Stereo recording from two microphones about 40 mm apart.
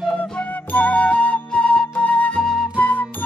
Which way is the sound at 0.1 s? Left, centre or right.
Left.